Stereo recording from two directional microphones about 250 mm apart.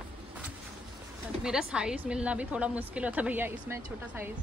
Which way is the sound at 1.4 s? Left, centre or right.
Centre.